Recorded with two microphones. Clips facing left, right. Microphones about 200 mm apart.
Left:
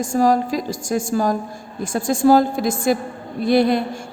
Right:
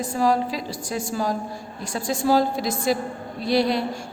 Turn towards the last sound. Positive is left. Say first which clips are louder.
# left 5 dB
turn(degrees=50)  # may be behind; listen again after turning